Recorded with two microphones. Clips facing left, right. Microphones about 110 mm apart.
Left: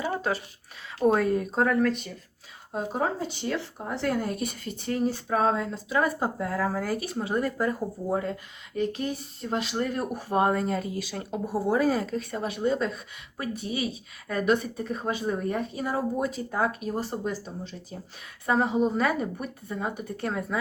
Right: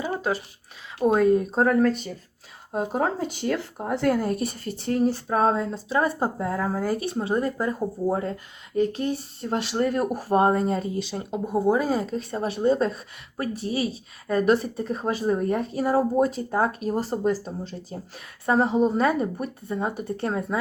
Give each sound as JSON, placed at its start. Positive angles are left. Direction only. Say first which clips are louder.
{"t": 0.0, "sound": "a sound", "louder": "right 2 dB", "side_deg": -15}
{"t": 0.9, "sound": "speech", "louder": "right 3 dB", "side_deg": -20}
{"t": 1.6, "sound": "speech", "louder": "right 3 dB", "side_deg": -40}
{"t": 2.7, "sound": "speech", "louder": "right 3 dB", "side_deg": -50}